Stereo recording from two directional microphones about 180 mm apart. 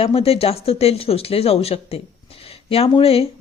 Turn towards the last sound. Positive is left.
turn(degrees=35)  # may be behind; listen again after turning